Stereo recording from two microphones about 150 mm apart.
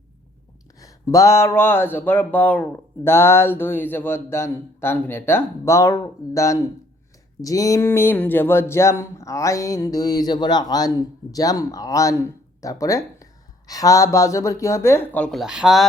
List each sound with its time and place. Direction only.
0.8 s speech: 20° left (ahead or behind); by 15.9 s centre (ahead or behind)